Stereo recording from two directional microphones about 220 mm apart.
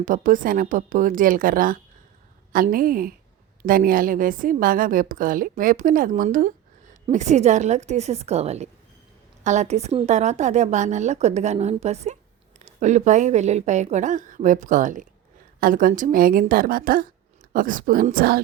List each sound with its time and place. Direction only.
0.0 s a woman's voice: 35° right (ahead or behind)